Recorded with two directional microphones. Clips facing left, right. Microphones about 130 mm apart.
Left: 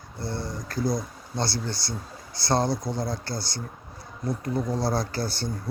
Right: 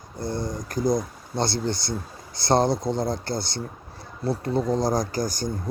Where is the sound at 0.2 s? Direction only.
15° right (ahead or behind).